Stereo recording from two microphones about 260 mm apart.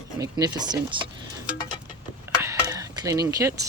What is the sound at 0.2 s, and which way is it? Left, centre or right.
Speech, centre.